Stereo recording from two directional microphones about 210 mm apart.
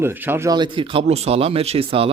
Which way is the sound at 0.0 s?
10° right (ahead or behind).